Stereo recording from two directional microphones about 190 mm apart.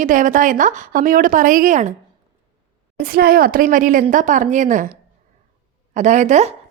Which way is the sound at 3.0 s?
50° right (ahead or behind).